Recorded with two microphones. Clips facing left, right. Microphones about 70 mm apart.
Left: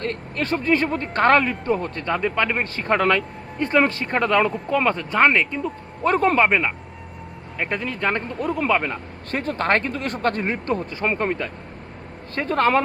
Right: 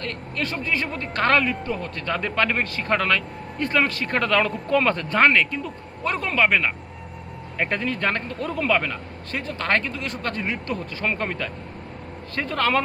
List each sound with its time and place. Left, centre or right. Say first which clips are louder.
0.0 s speech: left 3 dB; left
2.0 s speech: left 1 dB; centre
2.6 s speech: left 3 dB; left
6.0 s speech: left 5 dB; left
6.5 s speech: left 1 dB; centre
9.3 s speech: left 3 dB; left
12.3 s speech: left 4 dB; left